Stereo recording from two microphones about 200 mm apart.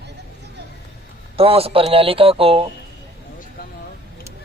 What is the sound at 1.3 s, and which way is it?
Speech, 30° right (ahead or behind).